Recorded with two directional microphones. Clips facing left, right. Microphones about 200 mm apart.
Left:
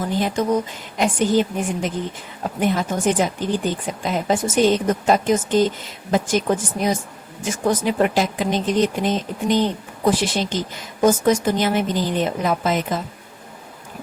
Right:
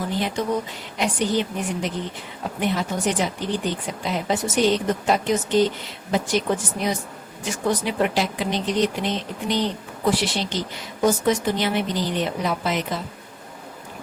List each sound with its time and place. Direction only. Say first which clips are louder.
0.2 s speech: left 5 dB; 45° left (ahead or behind)